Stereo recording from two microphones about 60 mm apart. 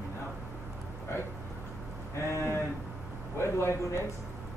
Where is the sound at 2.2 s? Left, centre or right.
Left.